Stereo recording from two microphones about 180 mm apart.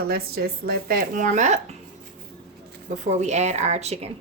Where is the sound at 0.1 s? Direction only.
60° right (ahead or behind); by 1.7 s 40° right (ahead or behind).